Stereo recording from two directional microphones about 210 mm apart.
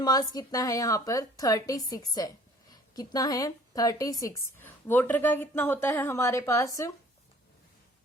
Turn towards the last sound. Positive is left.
turn(degrees=15)  # may be behind; listen again after turning